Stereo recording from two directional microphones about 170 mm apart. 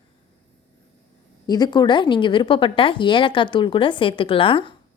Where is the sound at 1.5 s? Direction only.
25° left (ahead or behind).